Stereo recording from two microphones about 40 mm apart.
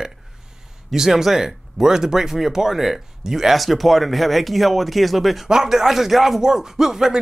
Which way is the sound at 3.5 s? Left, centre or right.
Centre.